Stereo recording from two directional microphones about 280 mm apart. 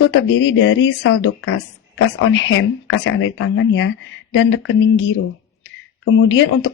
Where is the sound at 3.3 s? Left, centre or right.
Left.